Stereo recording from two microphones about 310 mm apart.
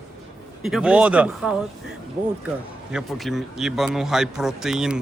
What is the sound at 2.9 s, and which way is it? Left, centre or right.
A man's voice, centre.